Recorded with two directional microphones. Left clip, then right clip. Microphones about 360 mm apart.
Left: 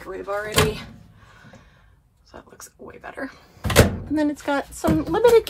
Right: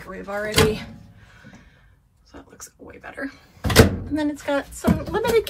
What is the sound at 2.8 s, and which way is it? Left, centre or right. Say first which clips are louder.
Speech: left 3 dB; centre.